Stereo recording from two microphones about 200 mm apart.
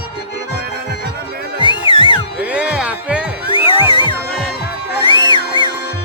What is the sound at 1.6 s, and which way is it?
Music, 25° left (ahead or behind).